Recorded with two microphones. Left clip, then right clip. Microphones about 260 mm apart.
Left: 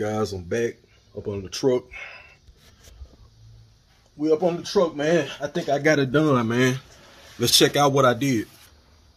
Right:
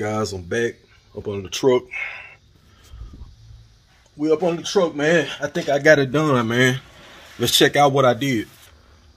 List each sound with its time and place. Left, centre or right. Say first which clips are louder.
0.0 s speech: right 2 dB; centre
4.2 s speech: right 2 dB; centre